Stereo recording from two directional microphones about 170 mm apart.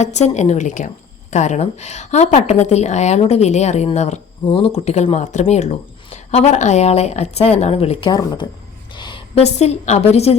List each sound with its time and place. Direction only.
0.0 s a woman's voice: 40° left (ahead or behind)
8.1 s a woman's voice: 20° left (ahead or behind); by 10.3 s 40° left (ahead or behind)